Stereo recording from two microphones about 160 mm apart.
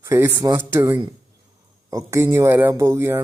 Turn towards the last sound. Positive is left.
turn(degrees=-15)  # may be behind; listen again after turning